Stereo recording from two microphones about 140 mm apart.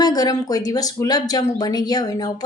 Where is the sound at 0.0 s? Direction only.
30° left (ahead or behind).